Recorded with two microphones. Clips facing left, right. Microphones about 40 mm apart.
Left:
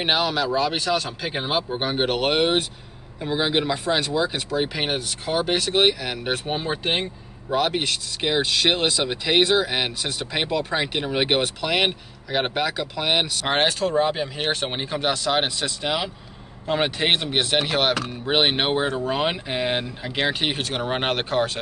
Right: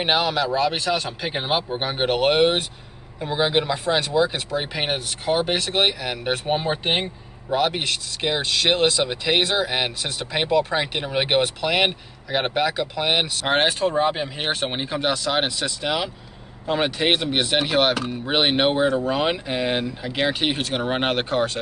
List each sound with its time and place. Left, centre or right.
0.0 s speech: centre
7.4 s speech: centre